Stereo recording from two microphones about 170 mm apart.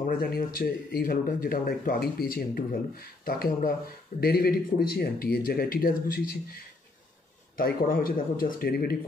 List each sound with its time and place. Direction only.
0.0 s speech: 60° left (ahead or behind)
7.5 s speech: 55° left (ahead or behind)